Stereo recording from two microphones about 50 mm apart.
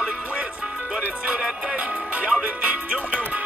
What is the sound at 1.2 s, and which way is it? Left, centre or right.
Music, right.